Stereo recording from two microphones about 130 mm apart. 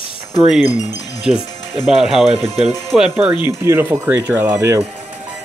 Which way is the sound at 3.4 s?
15° right (ahead or behind).